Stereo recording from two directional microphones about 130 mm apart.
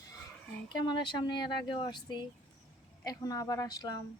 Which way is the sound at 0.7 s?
35° left (ahead or behind).